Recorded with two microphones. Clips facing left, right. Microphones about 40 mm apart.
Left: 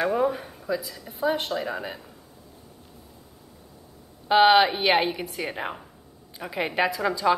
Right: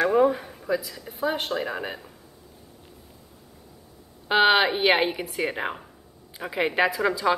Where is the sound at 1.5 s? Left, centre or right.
Centre.